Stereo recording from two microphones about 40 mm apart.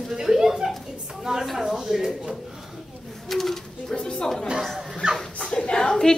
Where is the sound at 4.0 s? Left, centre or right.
Left.